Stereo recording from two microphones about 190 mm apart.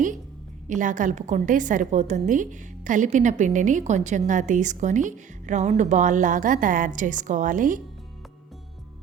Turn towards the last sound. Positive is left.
turn(degrees=-45)  # may be behind; listen again after turning